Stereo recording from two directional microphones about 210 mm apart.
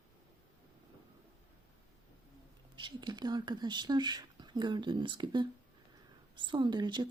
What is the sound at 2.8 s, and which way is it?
Speech, 20° right (ahead or behind).